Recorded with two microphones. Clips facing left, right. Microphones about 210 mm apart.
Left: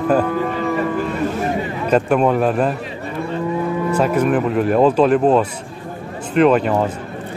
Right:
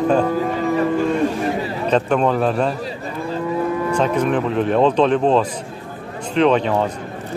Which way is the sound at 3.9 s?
5° left (ahead or behind).